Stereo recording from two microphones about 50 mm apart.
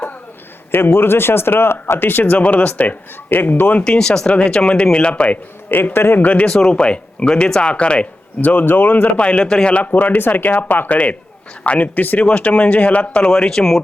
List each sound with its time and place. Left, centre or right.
0.7 s speech: left
3.2 s speech: left
3.8 s speech: centre
5.6 s speech: left
6.1 s speech: left
6.4 s speech: centre; by 8.6 s left
8.6 s speech: left
9.1 s speech: left
13.3 s speech: centre